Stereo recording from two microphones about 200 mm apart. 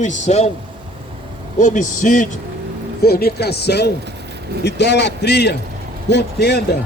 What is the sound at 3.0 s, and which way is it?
A man's voice, 50° left (ahead or behind).